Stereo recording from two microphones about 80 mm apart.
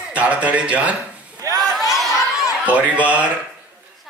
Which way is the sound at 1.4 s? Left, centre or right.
Right.